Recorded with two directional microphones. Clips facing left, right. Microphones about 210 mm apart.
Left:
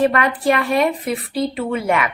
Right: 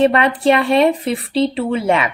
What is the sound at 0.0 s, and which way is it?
A woman's voice, 25° right (ahead or behind).